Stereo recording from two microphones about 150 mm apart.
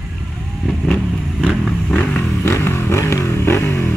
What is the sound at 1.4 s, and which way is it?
Vehicle, 10° left (ahead or behind).